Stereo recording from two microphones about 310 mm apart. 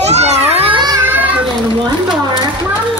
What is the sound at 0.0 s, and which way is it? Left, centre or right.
Children playing, right.